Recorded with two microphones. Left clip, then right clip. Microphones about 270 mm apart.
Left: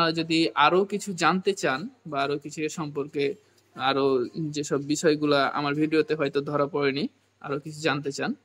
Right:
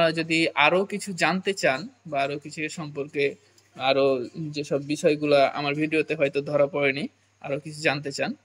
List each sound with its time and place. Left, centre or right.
0.0 s speech: centre